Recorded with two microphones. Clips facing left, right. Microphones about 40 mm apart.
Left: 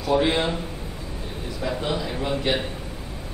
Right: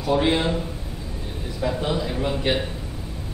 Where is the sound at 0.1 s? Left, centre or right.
Centre.